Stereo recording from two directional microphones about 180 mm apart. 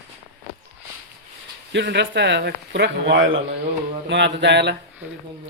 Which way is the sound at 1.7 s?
75° right (ahead or behind).